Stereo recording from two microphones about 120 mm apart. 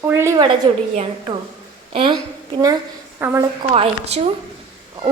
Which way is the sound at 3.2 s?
20° right (ahead or behind).